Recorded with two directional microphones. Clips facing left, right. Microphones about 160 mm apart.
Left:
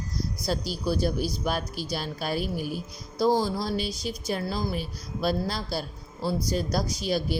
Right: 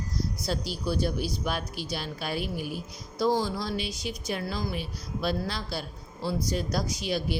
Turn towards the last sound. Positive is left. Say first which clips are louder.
# left 2 dB
turn(degrees=40)  # may be behind; listen again after turning